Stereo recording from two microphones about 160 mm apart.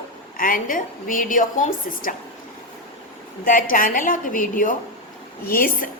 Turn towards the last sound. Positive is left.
turn(degrees=65)  # may be behind; listen again after turning